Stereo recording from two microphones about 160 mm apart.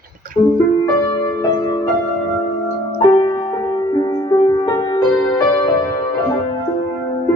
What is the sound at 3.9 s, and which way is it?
Music, 25° left (ahead or behind).